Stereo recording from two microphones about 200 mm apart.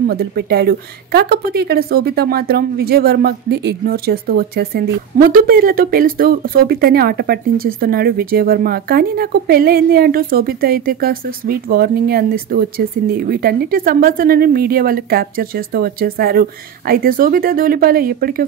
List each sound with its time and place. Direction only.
0.1 s speech: 55° right (ahead or behind)